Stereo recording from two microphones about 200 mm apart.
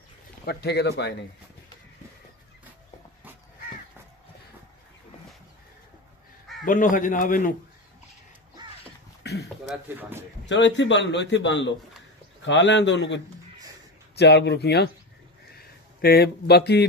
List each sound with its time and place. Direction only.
0.5 s a man's voice: 55° left (ahead or behind)
6.6 s speech: 40° left (ahead or behind)
9.2 s a sound: 55° left (ahead or behind)
9.7 s speech: 10° right (ahead or behind)
10.4 s a man's voice: 65° left (ahead or behind)
15.5 s a sound: 50° left (ahead or behind)